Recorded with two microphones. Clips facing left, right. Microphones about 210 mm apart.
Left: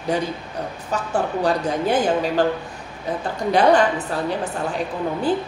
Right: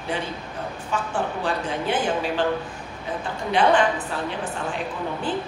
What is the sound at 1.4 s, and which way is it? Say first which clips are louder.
A woman's voice: left 5 dB; 40° left (ahead or behind).